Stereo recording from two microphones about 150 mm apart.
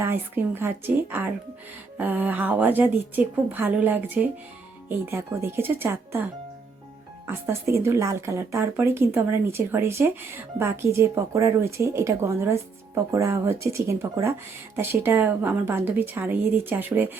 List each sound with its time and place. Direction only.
0.0 s speech: 15° right (ahead or behind)
7.3 s speech: 15° right (ahead or behind)